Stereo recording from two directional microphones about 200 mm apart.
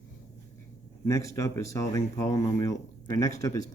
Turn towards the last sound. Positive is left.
turn(degrees=15)  # may be behind; listen again after turning